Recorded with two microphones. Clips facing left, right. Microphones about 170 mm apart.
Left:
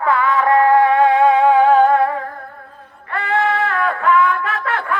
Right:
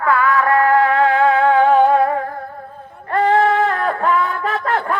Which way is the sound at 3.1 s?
40° right (ahead or behind).